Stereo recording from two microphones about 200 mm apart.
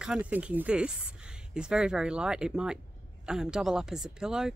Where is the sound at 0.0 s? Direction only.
5° right (ahead or behind).